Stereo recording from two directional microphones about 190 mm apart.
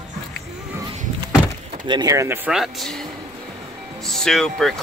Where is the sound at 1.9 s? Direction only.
20° right (ahead or behind).